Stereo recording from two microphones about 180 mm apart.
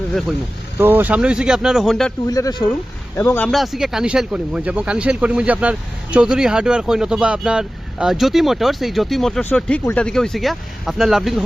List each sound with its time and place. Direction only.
0.1 s speech: centre (ahead or behind)
0.8 s speech: 10° right (ahead or behind)
2.2 s speech: 20° left (ahead or behind)
3.2 s speech: 10° left (ahead or behind)